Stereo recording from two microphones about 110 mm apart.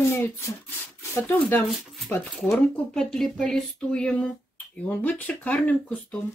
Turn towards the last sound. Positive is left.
turn(degrees=10)  # may be behind; listen again after turning